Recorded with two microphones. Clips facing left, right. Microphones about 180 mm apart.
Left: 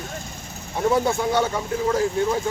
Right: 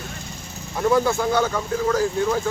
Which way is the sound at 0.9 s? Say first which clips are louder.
Right 2 dB; 25° left (ahead or behind).